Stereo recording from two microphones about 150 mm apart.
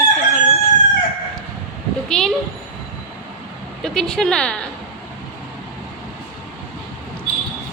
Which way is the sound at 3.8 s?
5° left (ahead or behind).